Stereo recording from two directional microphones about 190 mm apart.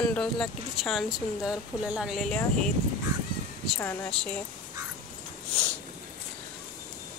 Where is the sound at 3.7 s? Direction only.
10° left (ahead or behind).